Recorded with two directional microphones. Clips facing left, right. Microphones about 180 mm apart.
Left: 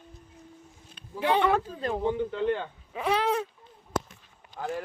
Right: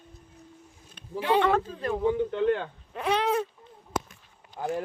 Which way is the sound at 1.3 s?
10° left (ahead or behind).